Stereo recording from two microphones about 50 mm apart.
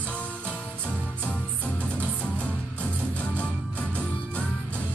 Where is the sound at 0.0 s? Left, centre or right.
Left.